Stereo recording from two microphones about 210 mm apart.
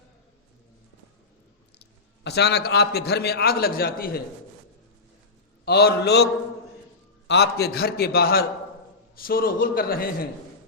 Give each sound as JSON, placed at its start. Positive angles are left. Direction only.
{"t": 2.2, "sound": "a man's voice", "side_deg": 50}
{"t": 5.6, "sound": "a man's voice", "side_deg": 50}
{"t": 7.3, "sound": "a man's voice", "side_deg": 50}